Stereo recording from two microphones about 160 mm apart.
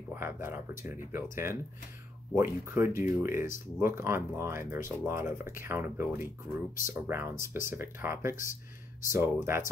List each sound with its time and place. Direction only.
0.1 s speech: 15° right (ahead or behind)